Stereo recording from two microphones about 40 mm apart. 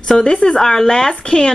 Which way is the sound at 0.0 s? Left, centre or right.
Left.